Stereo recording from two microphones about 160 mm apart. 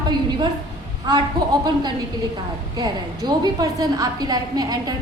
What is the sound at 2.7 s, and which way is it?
A woman's voice, 25° right (ahead or behind).